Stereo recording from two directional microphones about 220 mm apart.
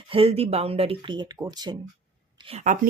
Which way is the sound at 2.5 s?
30° right (ahead or behind).